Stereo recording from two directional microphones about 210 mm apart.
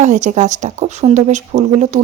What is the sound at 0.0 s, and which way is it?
A woman's voice, 35° right (ahead or behind).